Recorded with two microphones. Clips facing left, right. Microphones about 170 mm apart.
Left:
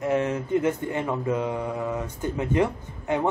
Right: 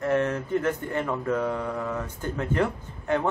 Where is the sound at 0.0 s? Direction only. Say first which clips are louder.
Even; 15° left (ahead or behind).